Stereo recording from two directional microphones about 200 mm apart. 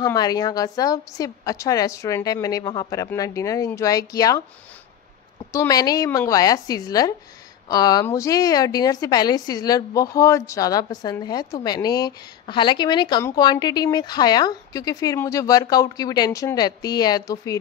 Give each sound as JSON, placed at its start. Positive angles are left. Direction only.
{"t": 0.0, "sound": "a woman's voice", "side_deg": 20}
{"t": 5.5, "sound": "a woman's voice", "side_deg": 15}